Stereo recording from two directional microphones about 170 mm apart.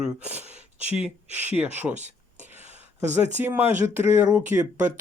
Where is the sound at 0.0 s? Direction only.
10° right (ahead or behind).